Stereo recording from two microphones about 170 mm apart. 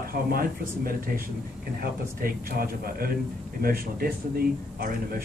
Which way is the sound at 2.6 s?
60° right (ahead or behind).